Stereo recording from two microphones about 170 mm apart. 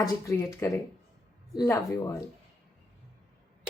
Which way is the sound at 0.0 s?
20° left (ahead or behind).